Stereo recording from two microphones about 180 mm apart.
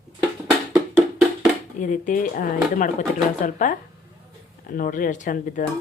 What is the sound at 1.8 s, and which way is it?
Speech, 45° left (ahead or behind).